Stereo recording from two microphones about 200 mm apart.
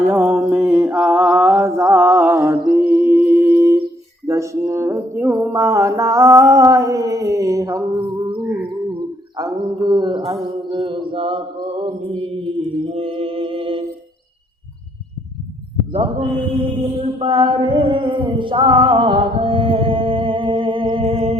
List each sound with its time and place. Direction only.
0.1 s mantra: 10° right (ahead or behind)
4.3 s music: 15° right (ahead or behind)
9.4 s mantra: 20° right (ahead or behind)
17.0 s mantra: 25° right (ahead or behind)